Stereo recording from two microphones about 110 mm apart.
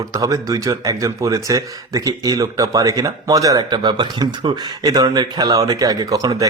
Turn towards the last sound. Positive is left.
turn(degrees=-35)  # may be behind; listen again after turning